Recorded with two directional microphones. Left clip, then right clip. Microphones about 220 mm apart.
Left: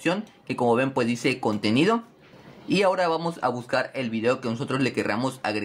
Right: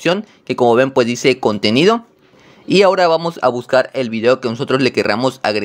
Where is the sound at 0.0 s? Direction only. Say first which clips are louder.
Right 10 dB; 40° right (ahead or behind).